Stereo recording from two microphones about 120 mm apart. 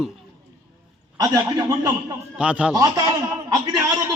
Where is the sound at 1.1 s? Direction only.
30° right (ahead or behind).